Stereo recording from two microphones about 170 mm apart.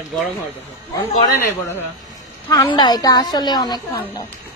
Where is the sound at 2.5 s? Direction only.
25° left (ahead or behind).